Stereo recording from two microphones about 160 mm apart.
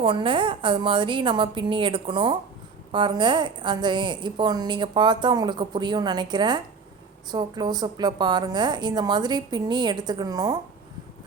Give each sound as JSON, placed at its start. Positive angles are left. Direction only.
{"t": 0.0, "sound": "a woman's voice", "side_deg": -35}